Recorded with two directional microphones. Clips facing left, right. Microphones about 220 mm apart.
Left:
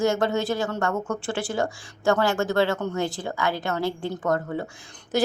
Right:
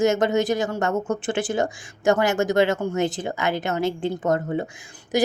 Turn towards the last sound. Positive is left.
turn(degrees=-15)  # may be behind; listen again after turning